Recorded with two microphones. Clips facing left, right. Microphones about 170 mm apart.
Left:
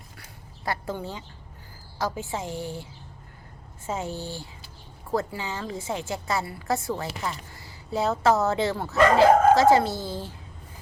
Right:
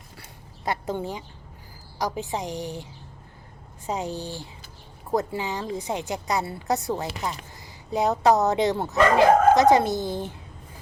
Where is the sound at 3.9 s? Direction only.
15° right (ahead or behind).